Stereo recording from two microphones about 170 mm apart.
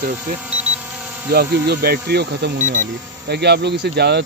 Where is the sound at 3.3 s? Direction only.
80° right.